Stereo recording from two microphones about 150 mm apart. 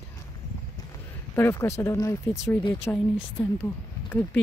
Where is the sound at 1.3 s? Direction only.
15° left (ahead or behind).